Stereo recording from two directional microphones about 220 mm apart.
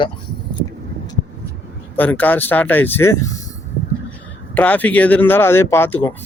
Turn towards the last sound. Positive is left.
turn(degrees=10)  # may be behind; listen again after turning